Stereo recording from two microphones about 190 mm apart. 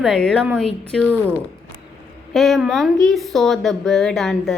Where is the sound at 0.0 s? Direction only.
Centre (ahead or behind).